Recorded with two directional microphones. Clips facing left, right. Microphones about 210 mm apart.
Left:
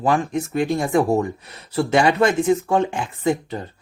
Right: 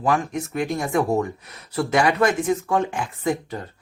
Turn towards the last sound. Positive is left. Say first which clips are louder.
# left 3 dB
turn(degrees=25)  # may be behind; listen again after turning